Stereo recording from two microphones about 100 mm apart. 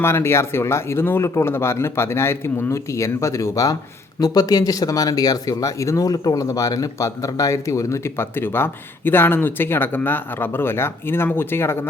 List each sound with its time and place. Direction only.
0.0 s speech: 25° left (ahead or behind)